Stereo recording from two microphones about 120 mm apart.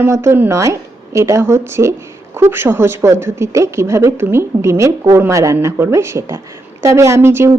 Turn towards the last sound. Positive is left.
turn(degrees=-20)  # may be behind; listen again after turning